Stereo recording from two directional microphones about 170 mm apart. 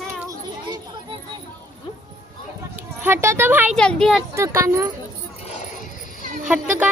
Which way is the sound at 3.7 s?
5° left (ahead or behind).